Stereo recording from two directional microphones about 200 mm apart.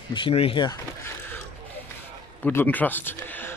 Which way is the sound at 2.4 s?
10° left (ahead or behind).